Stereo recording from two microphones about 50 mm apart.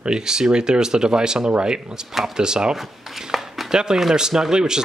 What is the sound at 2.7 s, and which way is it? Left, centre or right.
Speech, centre.